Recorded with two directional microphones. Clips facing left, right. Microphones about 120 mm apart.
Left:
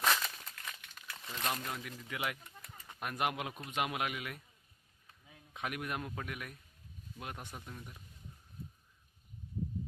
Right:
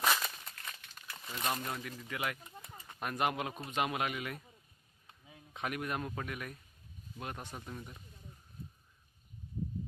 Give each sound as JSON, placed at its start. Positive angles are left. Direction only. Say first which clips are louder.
{"t": 0.0, "sound": "crumpling", "louder": "even", "side_deg": -10}
{"t": 2.1, "sound": "speech", "louder": "right 1 dB", "side_deg": 10}
{"t": 2.4, "sound": "bird", "louder": "right 3 dB", "side_deg": -20}
{"t": 2.9, "sound": "speech", "louder": "right 2 dB", "side_deg": 5}
{"t": 5.2, "sound": "a sound", "louder": "right 2 dB", "side_deg": -10}
{"t": 5.6, "sound": "speech", "louder": "right 2 dB", "side_deg": 5}